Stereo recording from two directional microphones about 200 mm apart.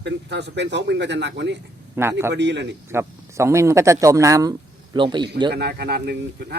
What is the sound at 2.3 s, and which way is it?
Speech, 60° right (ahead or behind).